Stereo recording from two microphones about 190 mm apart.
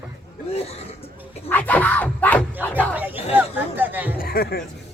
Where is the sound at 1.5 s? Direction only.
10° left (ahead or behind).